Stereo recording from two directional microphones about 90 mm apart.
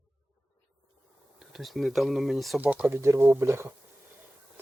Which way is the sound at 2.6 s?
15° right (ahead or behind).